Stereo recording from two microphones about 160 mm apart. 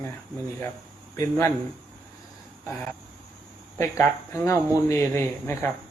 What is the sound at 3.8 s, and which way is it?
Speech, 20° left (ahead or behind).